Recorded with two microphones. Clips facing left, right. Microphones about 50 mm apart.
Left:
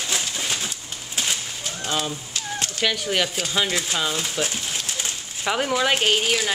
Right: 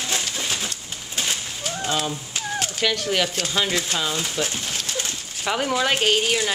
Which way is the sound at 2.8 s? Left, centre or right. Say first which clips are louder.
Even; centre.